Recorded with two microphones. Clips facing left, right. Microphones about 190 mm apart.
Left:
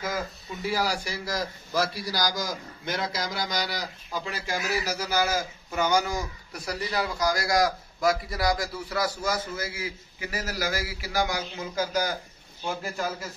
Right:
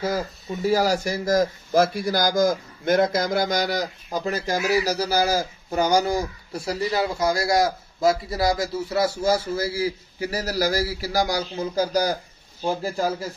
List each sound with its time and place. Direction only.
0.5 s speech: 45° right (ahead or behind)